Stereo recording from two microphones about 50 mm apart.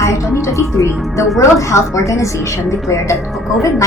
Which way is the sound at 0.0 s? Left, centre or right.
Left.